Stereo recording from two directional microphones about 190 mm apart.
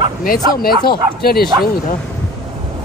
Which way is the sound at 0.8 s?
55° left (ahead or behind).